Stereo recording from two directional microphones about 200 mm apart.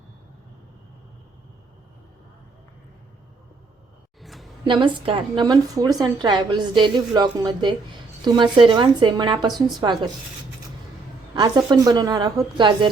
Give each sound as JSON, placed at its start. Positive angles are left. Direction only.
{"t": 4.2, "sound": "a sound", "side_deg": 0}
{"t": 4.6, "sound": "a woman's voice", "side_deg": -25}
{"t": 11.3, "sound": "a woman's voice", "side_deg": -20}